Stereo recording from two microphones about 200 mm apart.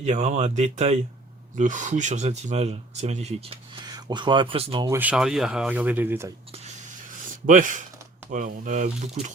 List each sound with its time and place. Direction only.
0.0 s speech: 35° right (ahead or behind)
4.9 s speech: 10° right (ahead or behind)
7.4 s speech: 40° right (ahead or behind)